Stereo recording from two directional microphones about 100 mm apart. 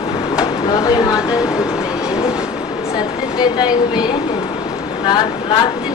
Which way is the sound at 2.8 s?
40° left (ahead or behind).